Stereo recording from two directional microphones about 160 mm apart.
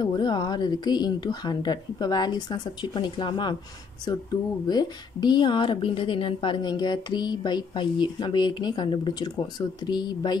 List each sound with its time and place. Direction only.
0.0 s a woman's voice: 25° left (ahead or behind)